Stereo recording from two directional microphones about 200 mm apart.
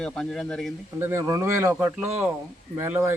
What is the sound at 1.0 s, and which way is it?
Speech, 15° right (ahead or behind).